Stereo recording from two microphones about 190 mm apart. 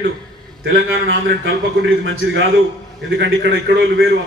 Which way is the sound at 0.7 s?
80° right.